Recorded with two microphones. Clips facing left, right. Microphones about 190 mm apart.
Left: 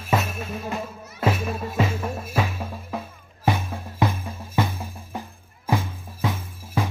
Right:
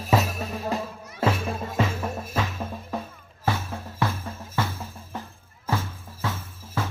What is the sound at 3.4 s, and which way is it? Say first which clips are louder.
Music: left 3 dB; 15° left (ahead or behind).